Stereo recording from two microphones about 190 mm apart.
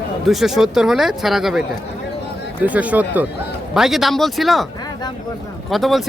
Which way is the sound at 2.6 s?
5° right (ahead or behind).